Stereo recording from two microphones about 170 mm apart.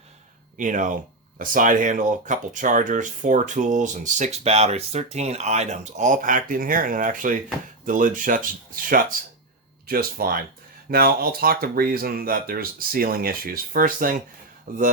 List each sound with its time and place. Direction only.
0.5 s speech: 50° right (ahead or behind)